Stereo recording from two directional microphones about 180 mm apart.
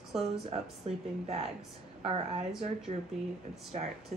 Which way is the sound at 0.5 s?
35° right (ahead or behind).